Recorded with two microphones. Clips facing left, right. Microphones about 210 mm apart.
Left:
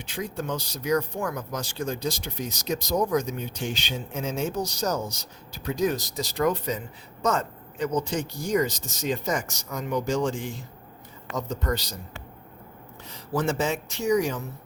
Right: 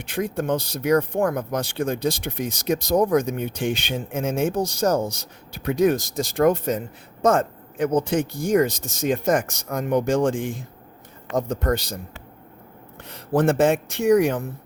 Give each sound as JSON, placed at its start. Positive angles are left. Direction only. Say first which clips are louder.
{"t": 0.0, "sound": "speech", "louder": "right 6 dB", "side_deg": -55}
{"t": 13.1, "sound": "speech", "louder": "right 7 dB", "side_deg": -60}